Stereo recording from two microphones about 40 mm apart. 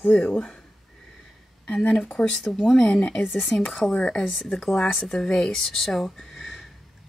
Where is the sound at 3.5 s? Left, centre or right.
Left.